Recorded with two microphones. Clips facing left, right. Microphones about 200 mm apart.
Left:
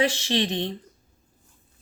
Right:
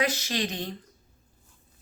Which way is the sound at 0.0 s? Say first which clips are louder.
Left 4 dB; 30° left (ahead or behind).